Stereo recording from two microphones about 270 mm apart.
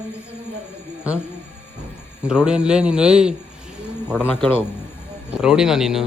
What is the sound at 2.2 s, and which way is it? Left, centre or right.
A man's voice, centre.